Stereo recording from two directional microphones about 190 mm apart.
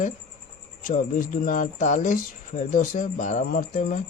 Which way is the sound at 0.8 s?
45° left (ahead or behind).